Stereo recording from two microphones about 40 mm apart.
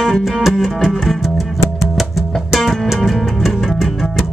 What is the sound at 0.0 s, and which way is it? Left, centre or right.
Music, centre.